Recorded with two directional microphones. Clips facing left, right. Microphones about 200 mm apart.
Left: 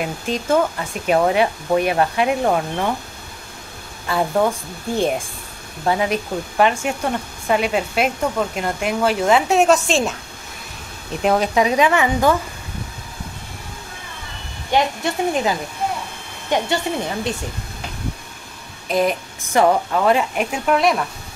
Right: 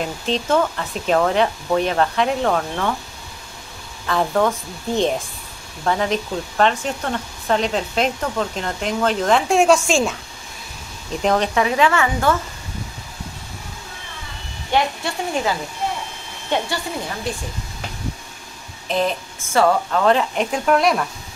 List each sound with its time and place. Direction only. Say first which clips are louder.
0.0 s speech: right 1 dB; 10° left (ahead or behind)
4.1 s speech: even; 10° left (ahead or behind)
11.2 s speech: left 2 dB; 5° left (ahead or behind)
14.7 s speech: left 2 dB; 20° left (ahead or behind)
18.9 s speech: left 2 dB; 15° left (ahead or behind)